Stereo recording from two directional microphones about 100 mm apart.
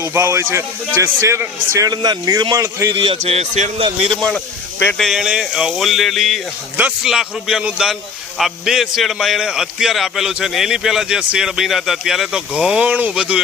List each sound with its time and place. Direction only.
0.0 s a man's voice: 20° right (ahead or behind)
1.9 s a man's voice: 40° right (ahead or behind)
2.9 s a man's voice: 60° right (ahead or behind); by 3.8 s 80° right
4.1 s a man's voice: 5° left (ahead or behind); by 13.4 s 10° right (ahead or behind)